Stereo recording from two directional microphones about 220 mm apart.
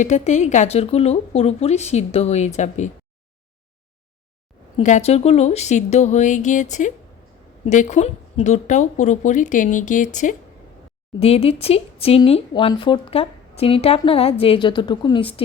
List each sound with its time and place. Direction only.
0.0 s a woman's voice: 35° left (ahead or behind)
4.8 s a woman's voice: 35° left (ahead or behind)